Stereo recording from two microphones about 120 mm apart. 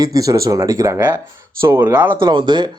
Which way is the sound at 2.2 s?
40° right (ahead or behind).